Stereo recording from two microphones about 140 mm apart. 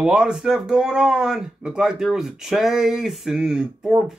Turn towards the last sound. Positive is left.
turn(degrees=-5)  # may be behind; listen again after turning